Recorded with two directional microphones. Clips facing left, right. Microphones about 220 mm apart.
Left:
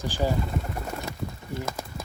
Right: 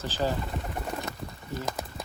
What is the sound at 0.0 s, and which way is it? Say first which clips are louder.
Speech: left 2 dB; 15° left (ahead or behind).